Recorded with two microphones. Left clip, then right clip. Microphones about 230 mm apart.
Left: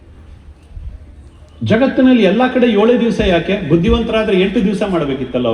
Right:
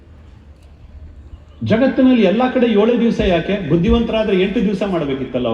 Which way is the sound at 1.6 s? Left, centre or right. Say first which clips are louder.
Left 2 dB; left.